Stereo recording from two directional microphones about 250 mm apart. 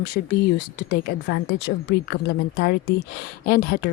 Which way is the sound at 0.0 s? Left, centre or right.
Left.